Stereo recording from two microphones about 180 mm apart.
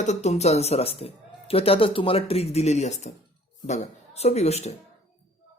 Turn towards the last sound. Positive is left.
turn(degrees=35)  # may be behind; listen again after turning